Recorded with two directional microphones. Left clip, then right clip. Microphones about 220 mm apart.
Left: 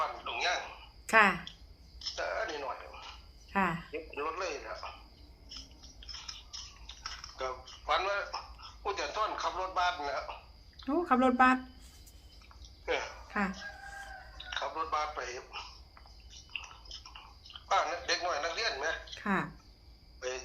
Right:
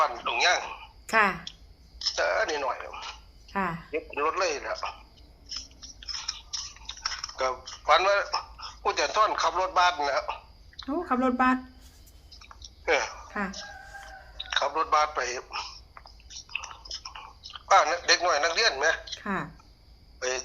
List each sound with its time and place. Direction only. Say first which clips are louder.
0.0 s a sound: right 9 dB; 45° right (ahead or behind)
1.0 s speech: right 1 dB; 5° right (ahead or behind)
2.0 s speech: right 9 dB; 45° right (ahead or behind)
3.5 s speech: right 1 dB; centre (ahead or behind)
3.9 s a man's voice: right 9 dB; 45° right (ahead or behind)
5.5 s chewing: right 10 dB; 45° right (ahead or behind)
10.8 s speech: right 1 dB; centre (ahead or behind)
12.4 s chewing: right 11 dB; 45° right (ahead or behind)
13.2 s music: right 1 dB; centre (ahead or behind)
14.5 s a sound: right 10 dB; 45° right (ahead or behind)
19.2 s speech: right 1 dB; centre (ahead or behind)
20.1 s speech: right 8 dB; 45° right (ahead or behind)